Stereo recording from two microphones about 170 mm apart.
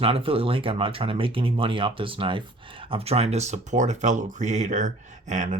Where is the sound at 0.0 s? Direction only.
30° right (ahead or behind).